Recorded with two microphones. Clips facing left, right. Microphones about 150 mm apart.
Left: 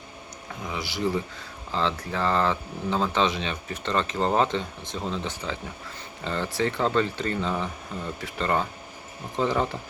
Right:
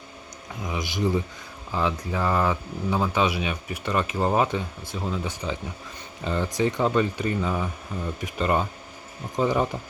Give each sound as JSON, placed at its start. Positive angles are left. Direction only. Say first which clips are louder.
{"t": 0.6, "sound": "speech", "louder": "right 2 dB", "side_deg": -15}